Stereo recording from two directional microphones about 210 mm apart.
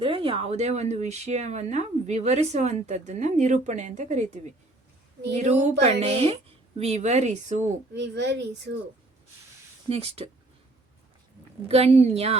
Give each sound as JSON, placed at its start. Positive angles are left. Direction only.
{"t": 0.0, "sound": "speech", "side_deg": -25}
{"t": 5.4, "sound": "speech", "side_deg": -35}
{"t": 7.9, "sound": "speech", "side_deg": -55}
{"t": 9.9, "sound": "a woman's voice", "side_deg": -30}
{"t": 11.7, "sound": "a woman's voice", "side_deg": -30}